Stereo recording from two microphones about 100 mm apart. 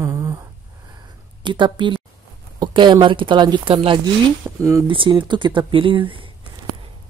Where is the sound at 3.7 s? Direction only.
60° right (ahead or behind).